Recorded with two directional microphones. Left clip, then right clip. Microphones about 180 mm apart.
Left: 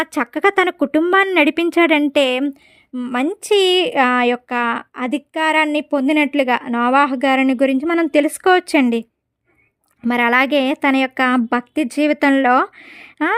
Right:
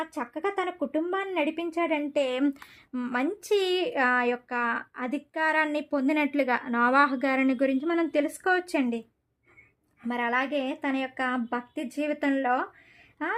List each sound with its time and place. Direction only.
0.0 s a woman's voice: 60° left (ahead or behind)
2.4 s speech: 20° left (ahead or behind)
3.1 s speech: 40° left (ahead or behind)
10.1 s a woman's voice: 55° left (ahead or behind)